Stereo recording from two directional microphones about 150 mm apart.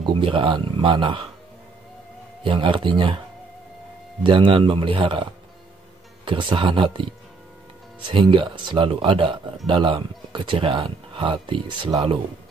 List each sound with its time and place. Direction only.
0.0 s speech: 35° right (ahead or behind)
2.4 s speech: 35° right (ahead or behind)
4.2 s speech: 35° right (ahead or behind)
8.1 s speech: 35° right (ahead or behind)